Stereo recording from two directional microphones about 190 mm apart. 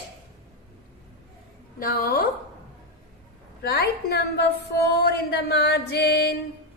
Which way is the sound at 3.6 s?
55° left (ahead or behind).